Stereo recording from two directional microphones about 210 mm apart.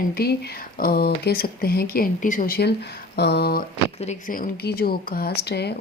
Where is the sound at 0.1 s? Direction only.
50° left (ahead or behind).